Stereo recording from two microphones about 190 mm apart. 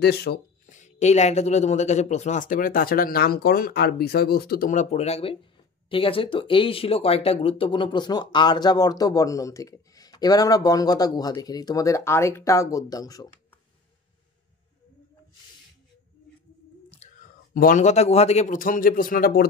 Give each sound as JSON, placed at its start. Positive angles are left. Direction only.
{"t": 0.0, "sound": "speech", "side_deg": 55}
{"t": 0.7, "sound": "speech", "side_deg": 40}
{"t": 17.0, "sound": "a sound", "side_deg": 35}
{"t": 17.6, "sound": "speech", "side_deg": 45}